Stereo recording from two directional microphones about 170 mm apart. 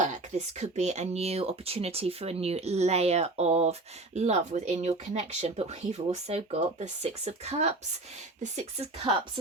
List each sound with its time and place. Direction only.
0.0 s speech: 45° right (ahead or behind)
9.0 s speech: 30° right (ahead or behind)